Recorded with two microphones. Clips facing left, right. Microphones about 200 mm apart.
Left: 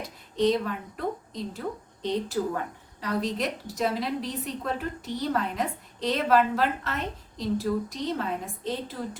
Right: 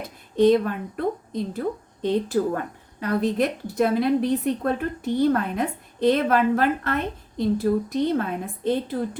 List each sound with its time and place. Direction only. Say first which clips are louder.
0.3 s a woman's voice: right 7 dB; 55° right (ahead or behind)